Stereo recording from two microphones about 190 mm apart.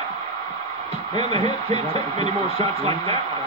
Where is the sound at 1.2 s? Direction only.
30° right (ahead or behind).